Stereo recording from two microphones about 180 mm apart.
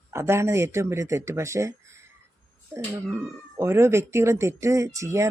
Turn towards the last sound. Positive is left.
turn(degrees=-15)  # may be behind; listen again after turning